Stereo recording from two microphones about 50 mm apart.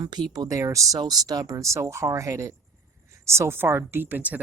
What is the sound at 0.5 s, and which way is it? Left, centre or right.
Speech, right.